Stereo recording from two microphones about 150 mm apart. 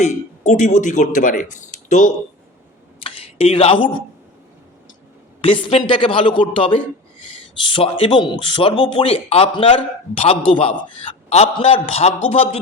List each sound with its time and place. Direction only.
0.0 s speech: 55° left (ahead or behind)
3.0 s speech: 40° left (ahead or behind)
5.4 s a man's voice: 35° left (ahead or behind)